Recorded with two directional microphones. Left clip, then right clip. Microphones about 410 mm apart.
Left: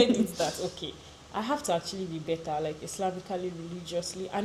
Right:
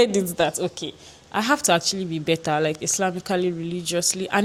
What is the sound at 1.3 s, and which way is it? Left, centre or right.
Speech, right.